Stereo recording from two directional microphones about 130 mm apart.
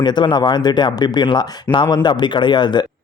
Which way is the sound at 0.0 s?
35° left (ahead or behind).